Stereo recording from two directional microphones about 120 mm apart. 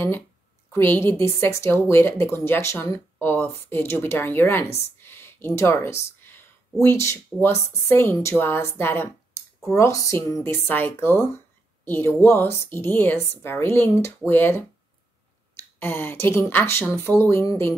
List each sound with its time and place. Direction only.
0.7 s a woman's voice: 20° left (ahead or behind)
15.8 s speech: 15° left (ahead or behind)